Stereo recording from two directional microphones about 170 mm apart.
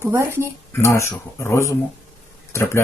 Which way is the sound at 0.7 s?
15° left (ahead or behind).